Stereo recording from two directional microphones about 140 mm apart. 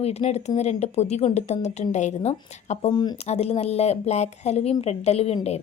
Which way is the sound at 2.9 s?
30° left (ahead or behind).